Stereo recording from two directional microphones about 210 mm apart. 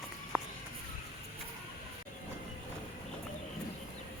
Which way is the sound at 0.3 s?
5° right (ahead or behind).